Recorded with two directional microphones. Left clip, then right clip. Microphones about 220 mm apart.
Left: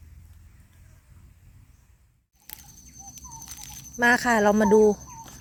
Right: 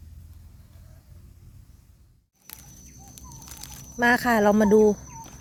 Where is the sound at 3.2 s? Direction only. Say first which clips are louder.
Left 1 dB; 5° left (ahead or behind).